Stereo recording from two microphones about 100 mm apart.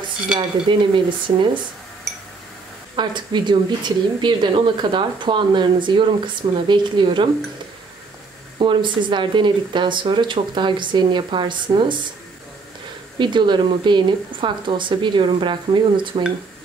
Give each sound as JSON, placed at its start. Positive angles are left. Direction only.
{"t": 0.7, "sound": "speech", "side_deg": -55}
{"t": 3.0, "sound": "speech", "side_deg": -50}
{"t": 8.5, "sound": "speech", "side_deg": -55}
{"t": 13.2, "sound": "speech", "side_deg": -50}